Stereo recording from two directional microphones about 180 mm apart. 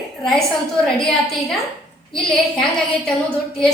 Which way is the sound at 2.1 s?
5° left (ahead or behind).